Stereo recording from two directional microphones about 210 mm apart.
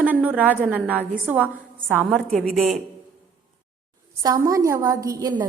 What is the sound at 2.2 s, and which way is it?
Speech, 5° left (ahead or behind).